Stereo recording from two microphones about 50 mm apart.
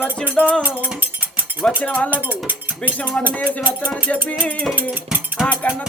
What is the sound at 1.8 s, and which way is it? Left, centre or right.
Cutlery, left.